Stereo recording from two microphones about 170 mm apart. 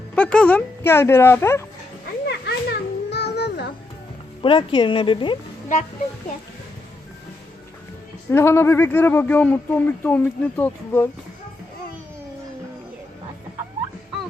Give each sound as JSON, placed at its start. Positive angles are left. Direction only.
{"t": 0.2, "sound": "speech", "side_deg": 5}
{"t": 2.2, "sound": "children playing", "side_deg": 75}
{"t": 4.4, "sound": "speech", "side_deg": 30}
{"t": 8.3, "sound": "speech", "side_deg": 15}